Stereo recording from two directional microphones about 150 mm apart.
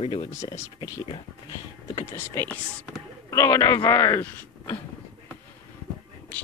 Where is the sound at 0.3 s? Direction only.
20° left (ahead or behind).